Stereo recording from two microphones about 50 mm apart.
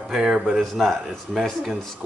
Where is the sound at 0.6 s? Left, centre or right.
Centre.